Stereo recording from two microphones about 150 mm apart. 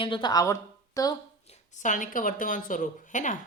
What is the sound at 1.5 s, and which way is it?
A woman's voice, 55° left (ahead or behind).